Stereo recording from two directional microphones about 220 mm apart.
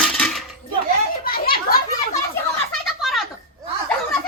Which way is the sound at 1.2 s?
40° left (ahead or behind).